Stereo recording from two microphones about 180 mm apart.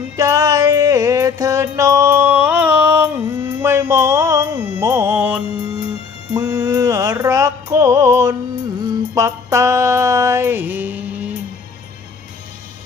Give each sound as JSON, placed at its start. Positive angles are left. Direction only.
{"t": 0.2, "sound": "music", "side_deg": -20}